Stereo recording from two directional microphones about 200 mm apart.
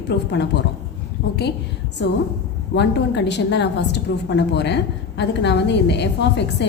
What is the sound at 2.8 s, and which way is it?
A woman's voice, 60° left (ahead or behind).